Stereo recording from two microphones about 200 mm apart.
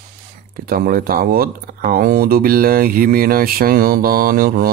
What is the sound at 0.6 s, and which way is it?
Speech, 45° right (ahead or behind).